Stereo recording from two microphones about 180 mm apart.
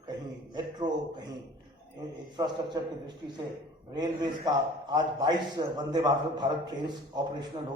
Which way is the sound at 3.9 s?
20° right (ahead or behind).